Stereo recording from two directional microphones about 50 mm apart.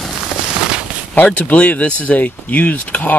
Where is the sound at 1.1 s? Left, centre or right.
Left.